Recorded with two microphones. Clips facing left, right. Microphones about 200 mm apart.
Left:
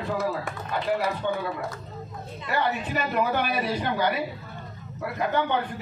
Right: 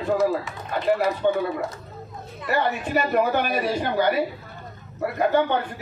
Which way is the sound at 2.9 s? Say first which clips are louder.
Right 8 dB; 50° right (ahead or behind).